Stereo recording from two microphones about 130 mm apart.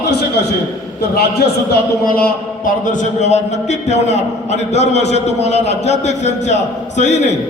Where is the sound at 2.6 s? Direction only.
80° left.